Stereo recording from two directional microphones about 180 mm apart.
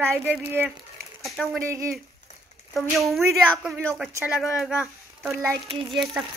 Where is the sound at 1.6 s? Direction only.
15° right (ahead or behind).